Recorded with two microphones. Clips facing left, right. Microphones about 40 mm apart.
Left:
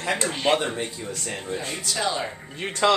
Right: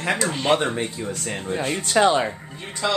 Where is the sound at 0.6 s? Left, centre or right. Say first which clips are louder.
Right 3 dB; right.